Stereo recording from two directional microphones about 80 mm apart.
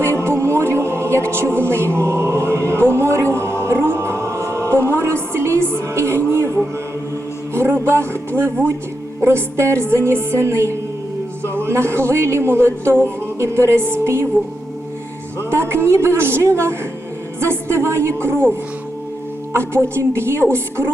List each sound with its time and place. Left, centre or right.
0.2 s music: right
1.6 s chant: right
7.5 s speech: right
15.4 s a woman's voice: right
19.5 s speech: right